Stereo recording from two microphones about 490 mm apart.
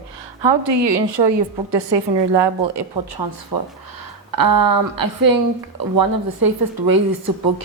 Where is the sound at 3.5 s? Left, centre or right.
Right.